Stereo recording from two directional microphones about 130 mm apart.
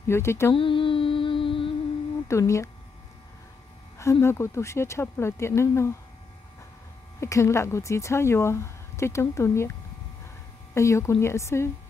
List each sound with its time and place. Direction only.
0.0 s speech: 20° left (ahead or behind)
0.6 s music: 40° left (ahead or behind)
2.2 s speech: 20° left (ahead or behind)
4.0 s speech: 20° left (ahead or behind)
7.2 s speech: 20° left (ahead or behind)
10.7 s speech: 20° left (ahead or behind)